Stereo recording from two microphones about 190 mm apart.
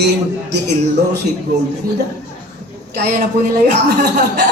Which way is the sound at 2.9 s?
55° right (ahead or behind).